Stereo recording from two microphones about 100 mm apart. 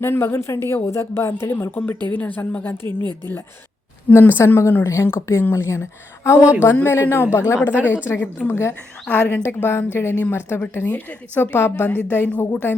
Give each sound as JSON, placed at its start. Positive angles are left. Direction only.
{"t": 0.0, "sound": "a woman's voice", "side_deg": 25}
{"t": 2.8, "sound": "speech", "side_deg": -50}
{"t": 4.1, "sound": "a woman's voice", "side_deg": 20}